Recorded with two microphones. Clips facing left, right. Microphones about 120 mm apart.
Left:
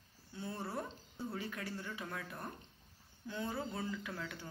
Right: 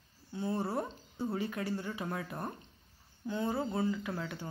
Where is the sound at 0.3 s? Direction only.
30° right (ahead or behind).